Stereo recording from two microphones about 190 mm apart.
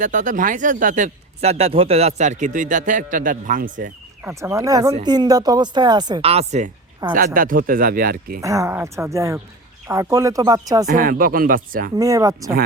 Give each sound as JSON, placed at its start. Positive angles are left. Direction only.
{"t": 0.0, "sound": "speech", "side_deg": -40}
{"t": 4.2, "sound": "speech", "side_deg": -10}
{"t": 7.0, "sound": "speech", "side_deg": -20}
{"t": 7.3, "sound": "speech", "side_deg": -45}
{"t": 8.4, "sound": "speech", "side_deg": -15}
{"t": 10.8, "sound": "speech", "side_deg": -45}
{"t": 11.9, "sound": "speech", "side_deg": -15}